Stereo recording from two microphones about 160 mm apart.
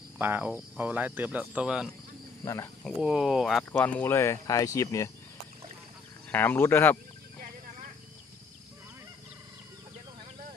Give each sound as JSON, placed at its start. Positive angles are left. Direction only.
{"t": 0.2, "sound": "speech", "side_deg": -10}
{"t": 2.4, "sound": "speech", "side_deg": 20}
{"t": 2.8, "sound": "speech", "side_deg": -5}
{"t": 3.7, "sound": "speech", "side_deg": 10}
{"t": 6.3, "sound": "speech", "side_deg": 10}